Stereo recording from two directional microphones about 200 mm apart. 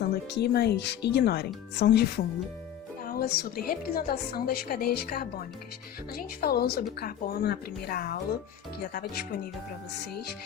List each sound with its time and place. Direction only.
0.0 s a woman's voice: 55° left (ahead or behind)